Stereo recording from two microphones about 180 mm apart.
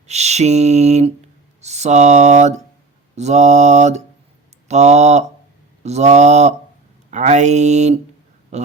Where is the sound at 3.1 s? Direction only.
40° right (ahead or behind).